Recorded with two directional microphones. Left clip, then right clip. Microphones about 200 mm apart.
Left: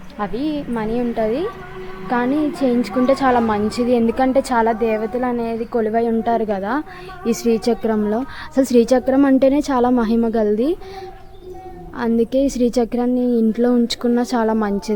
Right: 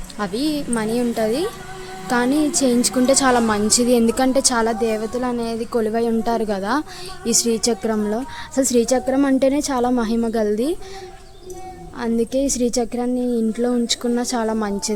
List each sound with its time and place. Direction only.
0.2 s a woman's voice: 20° right (ahead or behind)
7.3 s a woman's voice: centre (ahead or behind)
11.9 s a woman's voice: 5° left (ahead or behind)